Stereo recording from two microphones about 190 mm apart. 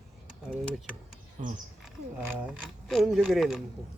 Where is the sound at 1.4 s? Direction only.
35° right (ahead or behind).